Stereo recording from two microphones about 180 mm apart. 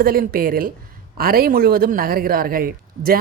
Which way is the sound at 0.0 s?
55° right (ahead or behind).